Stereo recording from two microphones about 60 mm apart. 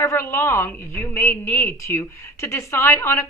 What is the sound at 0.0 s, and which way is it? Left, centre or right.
A woman's voice, left.